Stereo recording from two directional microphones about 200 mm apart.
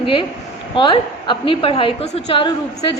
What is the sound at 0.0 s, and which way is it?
A woman's voice, 25° left (ahead or behind).